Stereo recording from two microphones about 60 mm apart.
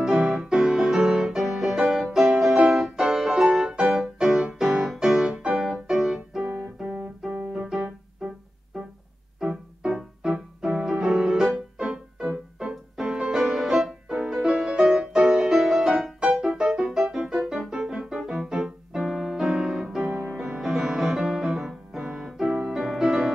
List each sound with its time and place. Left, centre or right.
0.0 s music: centre
6.4 s keyboard: right
9.4 s music: centre